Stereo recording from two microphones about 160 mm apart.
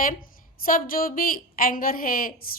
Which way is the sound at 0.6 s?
60° left (ahead or behind).